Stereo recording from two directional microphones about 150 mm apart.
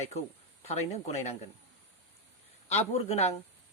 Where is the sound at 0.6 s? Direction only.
45° left (ahead or behind).